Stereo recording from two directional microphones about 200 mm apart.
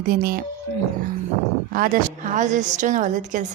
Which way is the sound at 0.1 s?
45° right (ahead or behind).